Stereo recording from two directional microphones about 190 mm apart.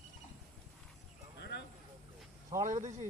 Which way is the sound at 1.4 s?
60° left (ahead or behind).